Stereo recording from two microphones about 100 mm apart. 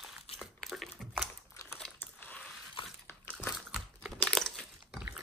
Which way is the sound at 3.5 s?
5° right (ahead or behind).